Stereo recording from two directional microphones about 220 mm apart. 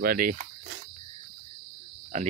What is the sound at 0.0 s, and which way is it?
Speech, 40° right (ahead or behind).